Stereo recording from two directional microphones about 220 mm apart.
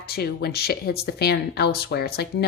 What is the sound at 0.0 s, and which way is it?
Speech, 45° left (ahead or behind).